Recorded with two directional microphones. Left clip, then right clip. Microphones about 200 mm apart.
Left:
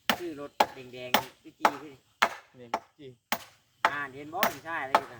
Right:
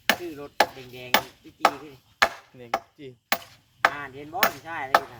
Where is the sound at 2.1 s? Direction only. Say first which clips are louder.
Right 4 dB; 30° right (ahead or behind).